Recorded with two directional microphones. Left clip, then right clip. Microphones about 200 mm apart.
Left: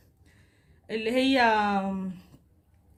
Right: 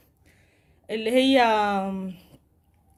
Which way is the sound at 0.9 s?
30° right (ahead or behind).